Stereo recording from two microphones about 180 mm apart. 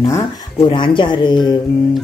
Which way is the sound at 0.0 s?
15° left (ahead or behind).